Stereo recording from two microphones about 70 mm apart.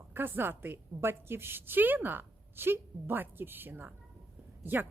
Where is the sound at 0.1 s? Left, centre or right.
Right.